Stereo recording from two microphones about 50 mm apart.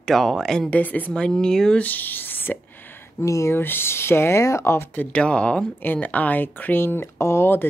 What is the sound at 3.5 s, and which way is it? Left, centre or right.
Speech, left.